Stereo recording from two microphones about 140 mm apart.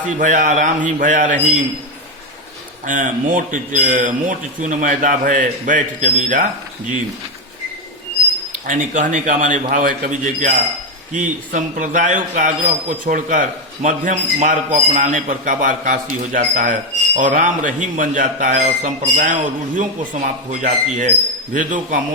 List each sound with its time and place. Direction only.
0.2 s speech: 65° right (ahead or behind)
2.8 s a man's voice: 70° right (ahead or behind)
8.6 s a man's voice: 65° right (ahead or behind)